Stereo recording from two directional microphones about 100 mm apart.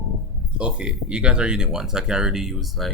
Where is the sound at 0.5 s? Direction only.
10° right (ahead or behind).